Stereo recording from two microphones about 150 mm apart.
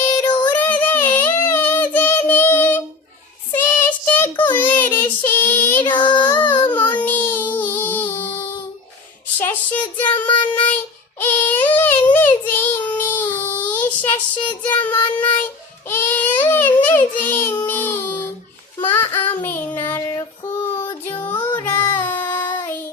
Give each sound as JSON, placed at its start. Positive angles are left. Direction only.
{"t": 0.1, "sound": "music", "side_deg": 25}
{"t": 0.5, "sound": "child singing", "side_deg": 10}
{"t": 5.8, "sound": "child singing", "side_deg": 30}
{"t": 6.2, "sound": "baby cry", "side_deg": 10}
{"t": 6.7, "sound": "child singing", "side_deg": 10}
{"t": 9.4, "sound": "speech", "side_deg": 10}
{"t": 10.2, "sound": "child singing", "side_deg": 30}
{"t": 11.2, "sound": "child singing", "side_deg": 10}
{"t": 20.8, "sound": "music", "side_deg": 15}
{"t": 21.9, "sound": "child singing", "side_deg": 10}
{"t": 22.4, "sound": "child singing", "side_deg": 30}
{"t": 22.6, "sound": "child singing", "side_deg": 15}